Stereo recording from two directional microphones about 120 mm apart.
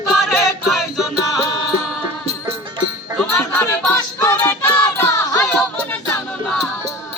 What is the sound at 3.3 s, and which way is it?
Music, 20° left (ahead or behind).